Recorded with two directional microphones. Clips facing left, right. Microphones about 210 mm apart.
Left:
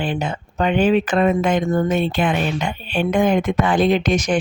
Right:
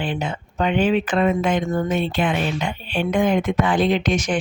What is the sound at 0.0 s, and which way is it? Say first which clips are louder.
Speech: left 2 dB; 40° left (ahead or behind).